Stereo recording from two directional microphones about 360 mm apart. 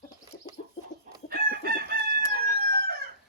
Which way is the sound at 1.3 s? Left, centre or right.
Right.